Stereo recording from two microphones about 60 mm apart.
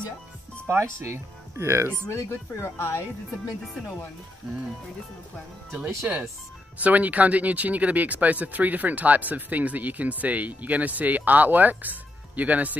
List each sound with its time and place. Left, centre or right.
0.7 s speech: right
2.0 s speech: left
6.0 s speech: right